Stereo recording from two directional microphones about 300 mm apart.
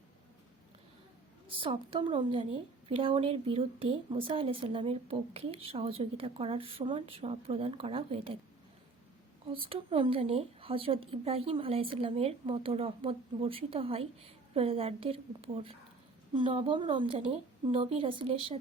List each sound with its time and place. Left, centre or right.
1.5 s a woman's voice: centre
9.5 s a woman's voice: centre